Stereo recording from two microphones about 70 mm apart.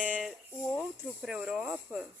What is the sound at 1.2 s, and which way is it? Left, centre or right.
Speech, centre.